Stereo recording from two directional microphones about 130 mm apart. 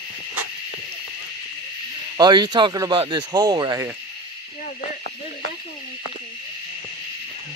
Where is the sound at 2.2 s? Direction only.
35° right (ahead or behind).